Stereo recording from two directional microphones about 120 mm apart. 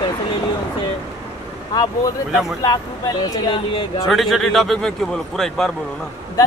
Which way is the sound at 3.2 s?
30° left (ahead or behind).